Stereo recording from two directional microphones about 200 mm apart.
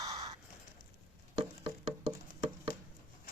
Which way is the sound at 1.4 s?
30° right (ahead or behind).